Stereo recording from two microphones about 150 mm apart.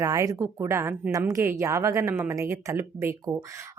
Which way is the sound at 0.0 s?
20° right (ahead or behind).